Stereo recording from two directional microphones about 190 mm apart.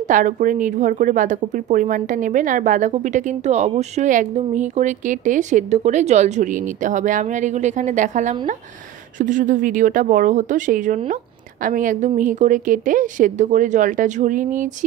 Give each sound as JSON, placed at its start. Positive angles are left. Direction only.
{"t": 0.1, "sound": "speech", "side_deg": -45}